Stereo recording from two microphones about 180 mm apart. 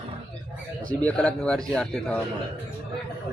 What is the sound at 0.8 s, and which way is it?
Speech, 5° left (ahead or behind).